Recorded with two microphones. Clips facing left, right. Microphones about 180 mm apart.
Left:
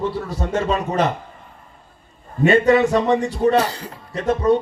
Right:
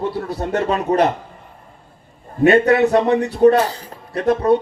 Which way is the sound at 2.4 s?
60° right (ahead or behind).